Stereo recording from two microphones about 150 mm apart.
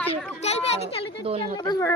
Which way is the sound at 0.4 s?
45° left (ahead or behind).